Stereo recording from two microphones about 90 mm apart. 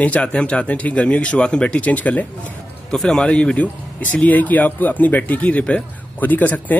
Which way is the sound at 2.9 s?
5° left (ahead or behind).